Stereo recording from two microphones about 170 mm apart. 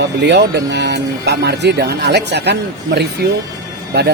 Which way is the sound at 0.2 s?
85° right.